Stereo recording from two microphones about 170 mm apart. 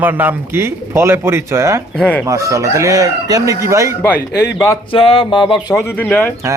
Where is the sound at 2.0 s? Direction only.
10° left (ahead or behind).